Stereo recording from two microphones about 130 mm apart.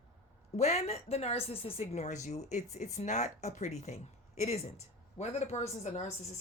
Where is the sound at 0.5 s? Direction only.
55° left (ahead or behind).